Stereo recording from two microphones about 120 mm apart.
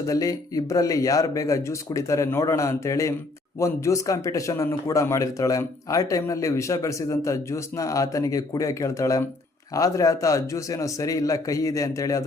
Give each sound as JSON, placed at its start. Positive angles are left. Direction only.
{"t": 0.1, "sound": "speech", "side_deg": 30}